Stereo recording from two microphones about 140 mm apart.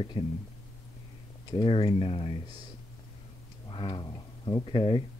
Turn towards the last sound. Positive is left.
turn(degrees=40)  # may be behind; listen again after turning